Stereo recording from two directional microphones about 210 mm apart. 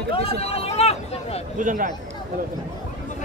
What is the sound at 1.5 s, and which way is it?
Speech, 40° right (ahead or behind).